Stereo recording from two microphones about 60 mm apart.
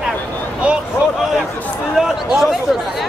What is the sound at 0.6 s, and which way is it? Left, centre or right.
Vehicle, right.